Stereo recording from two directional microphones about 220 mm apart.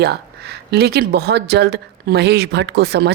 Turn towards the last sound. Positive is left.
turn(degrees=-45)  # may be behind; listen again after turning